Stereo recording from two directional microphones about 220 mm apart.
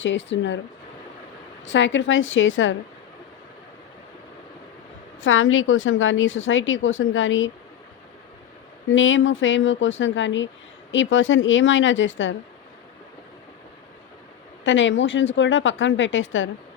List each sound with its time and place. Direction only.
0.0 s a woman's voice: 55° left (ahead or behind)
1.6 s a woman's voice: 55° left (ahead or behind)
5.2 s a woman's voice: 65° left (ahead or behind)
8.9 s a woman's voice: 60° left (ahead or behind)
14.6 s a woman's voice: 60° left (ahead or behind)